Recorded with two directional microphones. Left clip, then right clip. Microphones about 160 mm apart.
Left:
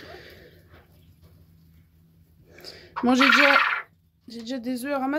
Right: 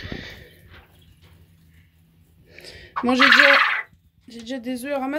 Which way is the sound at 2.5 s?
15° left (ahead or behind).